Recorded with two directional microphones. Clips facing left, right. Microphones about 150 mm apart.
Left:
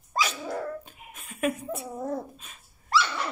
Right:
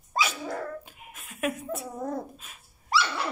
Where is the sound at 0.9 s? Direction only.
Centre (ahead or behind).